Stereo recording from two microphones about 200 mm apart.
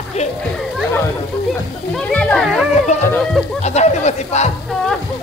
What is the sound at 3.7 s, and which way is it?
Speech, 35° left (ahead or behind).